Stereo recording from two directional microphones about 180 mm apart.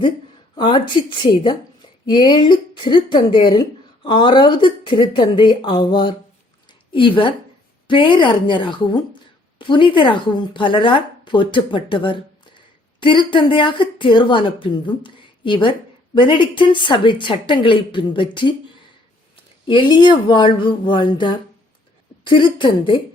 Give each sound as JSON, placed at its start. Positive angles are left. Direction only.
{"t": 0.5, "sound": "speech", "side_deg": 25}
{"t": 6.7, "sound": "a sound", "side_deg": 30}
{"t": 7.9, "sound": "speech", "side_deg": 25}
{"t": 19.6, "sound": "speech", "side_deg": 25}